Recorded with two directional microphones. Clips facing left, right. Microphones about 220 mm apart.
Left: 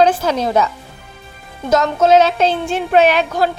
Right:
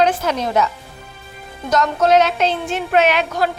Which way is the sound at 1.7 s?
25° left (ahead or behind).